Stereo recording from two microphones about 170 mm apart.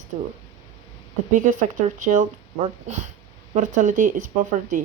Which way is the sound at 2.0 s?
50° right (ahead or behind).